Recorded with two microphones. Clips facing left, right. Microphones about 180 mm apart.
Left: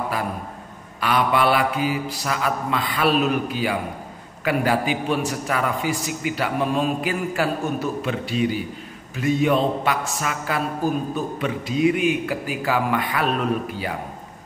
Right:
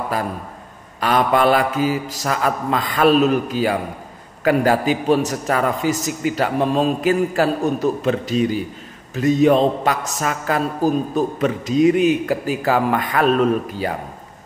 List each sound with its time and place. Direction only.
1.0 s mantra: 45° right (ahead or behind)
4.5 s a man's voice: 40° right (ahead or behind)